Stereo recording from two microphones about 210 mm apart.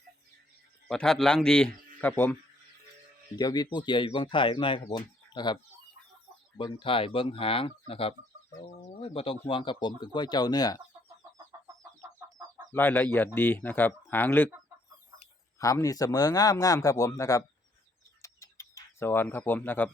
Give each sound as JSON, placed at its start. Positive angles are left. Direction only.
{"t": 0.9, "sound": "speech", "side_deg": 0}
{"t": 6.6, "sound": "speech", "side_deg": 25}
{"t": 8.8, "sound": "bird", "side_deg": 30}
{"t": 9.5, "sound": "speech", "side_deg": 25}
{"t": 11.7, "sound": "chicken", "side_deg": -15}
{"t": 12.7, "sound": "speech", "side_deg": 10}
{"t": 15.5, "sound": "speech", "side_deg": 15}
{"t": 18.2, "sound": "a sound", "side_deg": 15}